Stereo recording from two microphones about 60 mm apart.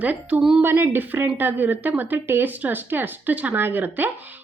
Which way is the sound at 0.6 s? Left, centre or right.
Right.